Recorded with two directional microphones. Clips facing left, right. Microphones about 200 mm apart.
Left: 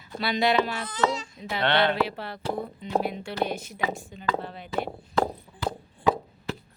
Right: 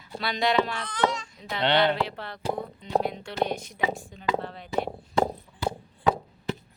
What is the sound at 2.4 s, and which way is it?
Speech, 15° right (ahead or behind).